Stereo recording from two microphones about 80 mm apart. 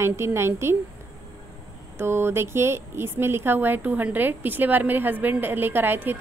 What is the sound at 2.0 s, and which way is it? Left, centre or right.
A woman's voice, right.